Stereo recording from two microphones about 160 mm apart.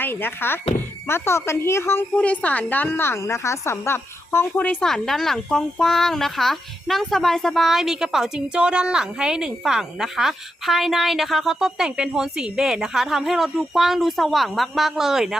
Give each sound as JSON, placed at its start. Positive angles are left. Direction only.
{"t": 0.0, "sound": "a woman's voice", "side_deg": 15}